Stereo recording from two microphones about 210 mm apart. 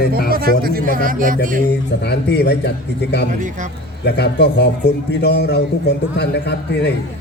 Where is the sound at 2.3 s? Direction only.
50° left (ahead or behind).